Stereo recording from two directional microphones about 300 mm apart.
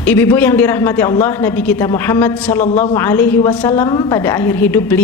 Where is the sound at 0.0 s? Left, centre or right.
Centre.